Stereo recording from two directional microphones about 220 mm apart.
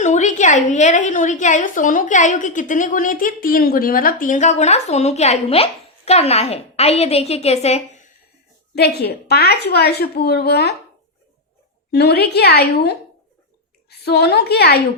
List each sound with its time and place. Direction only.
0.0 s a woman's voice: 30° left (ahead or behind)
8.7 s a woman's voice: 45° left (ahead or behind)
11.9 s a woman's voice: 45° left (ahead or behind)